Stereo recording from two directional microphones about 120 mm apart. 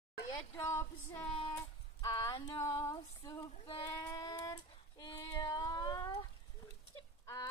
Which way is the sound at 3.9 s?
35° left (ahead or behind).